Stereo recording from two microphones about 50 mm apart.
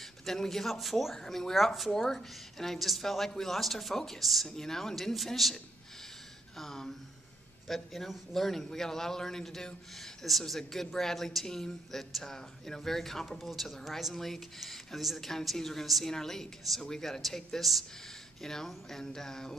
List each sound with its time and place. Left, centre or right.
0.0 s speech: centre